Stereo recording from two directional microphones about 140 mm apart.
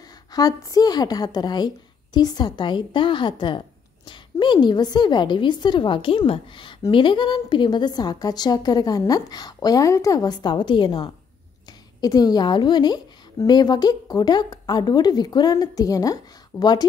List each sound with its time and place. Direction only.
0.3 s a woman's voice: 25° left (ahead or behind)